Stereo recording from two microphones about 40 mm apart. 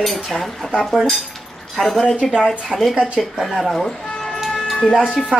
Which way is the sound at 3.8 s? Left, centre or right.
Centre.